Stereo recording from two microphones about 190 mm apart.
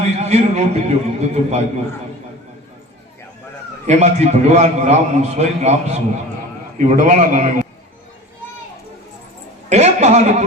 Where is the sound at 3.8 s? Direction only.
35° right (ahead or behind).